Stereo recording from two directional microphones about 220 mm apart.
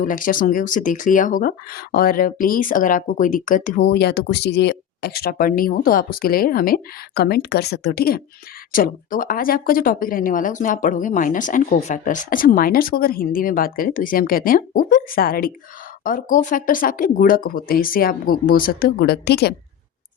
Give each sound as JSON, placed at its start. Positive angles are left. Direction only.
{"t": 0.0, "sound": "speech", "side_deg": 40}